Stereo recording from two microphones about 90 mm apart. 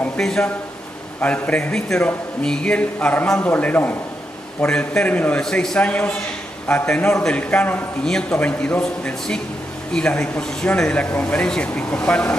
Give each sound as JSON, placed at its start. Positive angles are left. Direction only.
{"t": 0.2, "sound": "speech", "side_deg": 5}
{"t": 5.4, "sound": "speech", "side_deg": 5}